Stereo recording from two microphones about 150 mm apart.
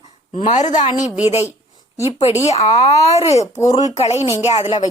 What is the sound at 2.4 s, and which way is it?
A woman's voice, 45° left (ahead or behind).